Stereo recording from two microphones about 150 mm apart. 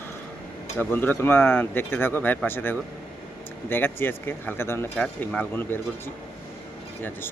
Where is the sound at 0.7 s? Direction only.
15° left (ahead or behind).